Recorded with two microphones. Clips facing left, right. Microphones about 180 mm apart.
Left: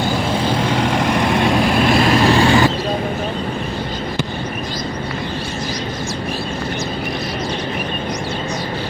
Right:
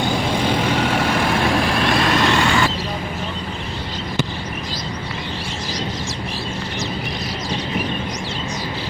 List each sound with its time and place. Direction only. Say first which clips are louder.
0.4 s vehicle: left 1 dB; 10° right (ahead or behind)
1.9 s vehicle: left 4 dB; 25° left (ahead or behind)